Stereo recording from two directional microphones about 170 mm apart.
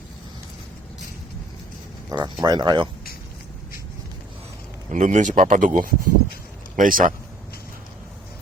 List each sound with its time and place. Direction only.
2.0 s speech: 25° right (ahead or behind)
4.9 s speech: 45° right (ahead or behind)